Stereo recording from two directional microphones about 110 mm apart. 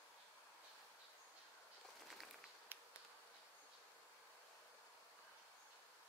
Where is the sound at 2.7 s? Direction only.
20° right (ahead or behind).